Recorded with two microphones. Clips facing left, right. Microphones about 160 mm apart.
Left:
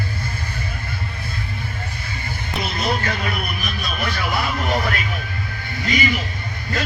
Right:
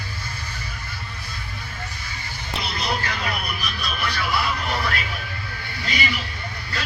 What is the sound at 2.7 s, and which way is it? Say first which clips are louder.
Music: left 4 dB; 50° left (ahead or behind).